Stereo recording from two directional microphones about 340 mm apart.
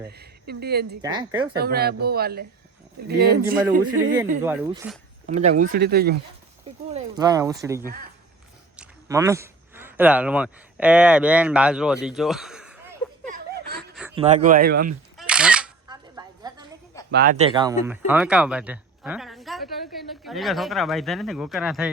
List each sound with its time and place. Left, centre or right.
0.1 s speech: right
1.0 s speech: centre
1.5 s speech: right
4.4 s speech: centre
5.3 s speech: centre
6.9 s speech: centre
8.8 s speech: centre
14.2 s speech: right
15.2 s a sound: centre
17.1 s speech: right; by 21.9 s centre